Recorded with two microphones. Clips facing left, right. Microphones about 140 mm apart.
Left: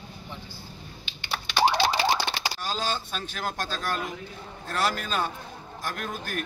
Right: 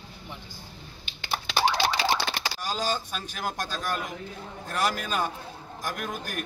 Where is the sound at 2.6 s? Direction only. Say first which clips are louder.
Right 2 dB; 15° right (ahead or behind).